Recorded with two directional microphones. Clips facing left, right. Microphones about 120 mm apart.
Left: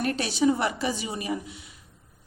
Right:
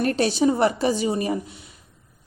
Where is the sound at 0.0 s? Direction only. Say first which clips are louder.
Right 4 dB; 35° right (ahead or behind).